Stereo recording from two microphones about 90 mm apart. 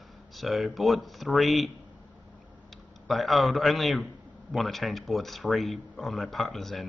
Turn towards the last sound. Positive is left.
turn(degrees=5)  # may be behind; listen again after turning